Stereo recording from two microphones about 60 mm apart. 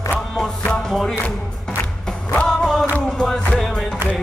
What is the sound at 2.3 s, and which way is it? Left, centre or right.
Music, centre.